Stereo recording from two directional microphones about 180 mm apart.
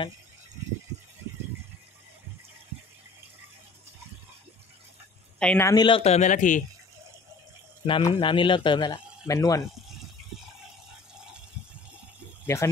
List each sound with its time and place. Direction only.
5.4 s speech: 5° left (ahead or behind)
5.7 s speech: 25° left (ahead or behind); by 6.6 s 45° left (ahead or behind)
7.8 s speech: 30° left (ahead or behind)
12.5 s speech: 15° left (ahead or behind)